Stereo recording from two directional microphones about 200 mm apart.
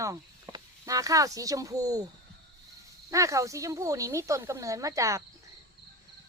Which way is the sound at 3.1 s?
15° right (ahead or behind).